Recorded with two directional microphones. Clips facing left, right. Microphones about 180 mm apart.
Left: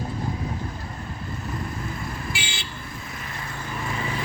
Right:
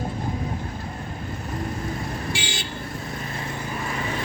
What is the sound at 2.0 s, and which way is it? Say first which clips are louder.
Vehicle: right 3 dB; 40° right (ahead or behind).